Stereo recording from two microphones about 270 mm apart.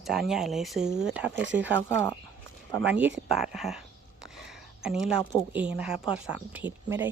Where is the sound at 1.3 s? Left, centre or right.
Right.